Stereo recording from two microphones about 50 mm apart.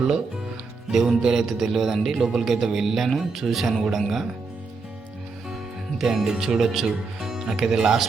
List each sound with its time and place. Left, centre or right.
0.9 s a man's voice: centre
6.0 s speech: centre